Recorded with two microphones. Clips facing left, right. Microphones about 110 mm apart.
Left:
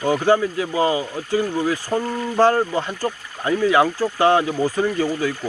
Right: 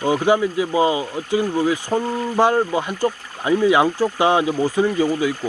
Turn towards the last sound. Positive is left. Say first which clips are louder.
# right 2 dB
turn(degrees=-15)  # may be behind; listen again after turning